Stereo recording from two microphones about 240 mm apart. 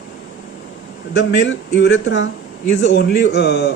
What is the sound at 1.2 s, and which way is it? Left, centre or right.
A man's voice, left.